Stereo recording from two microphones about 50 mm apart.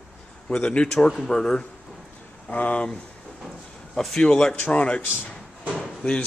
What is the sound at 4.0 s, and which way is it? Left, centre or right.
Speech, centre.